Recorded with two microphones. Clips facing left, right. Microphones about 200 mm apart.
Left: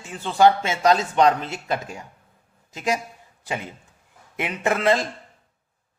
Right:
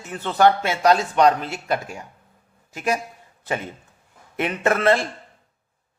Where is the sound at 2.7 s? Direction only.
15° left (ahead or behind).